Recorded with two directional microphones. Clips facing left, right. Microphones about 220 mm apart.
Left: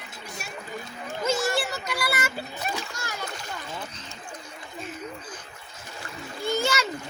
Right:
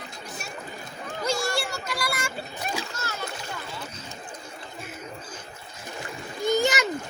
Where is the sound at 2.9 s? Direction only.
15° left (ahead or behind).